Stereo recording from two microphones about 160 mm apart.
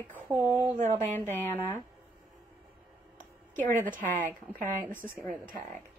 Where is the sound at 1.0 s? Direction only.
15° left (ahead or behind).